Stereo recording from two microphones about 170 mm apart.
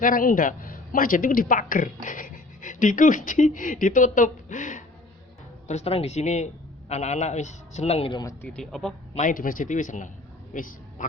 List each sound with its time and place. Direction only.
0.0 s a woman's voice: 55° left (ahead or behind)
5.6 s speech: 40° left (ahead or behind)
8.2 s speech: 20° left (ahead or behind)
8.4 s speech: 5° left (ahead or behind)
9.1 s a woman's voice: 50° left (ahead or behind)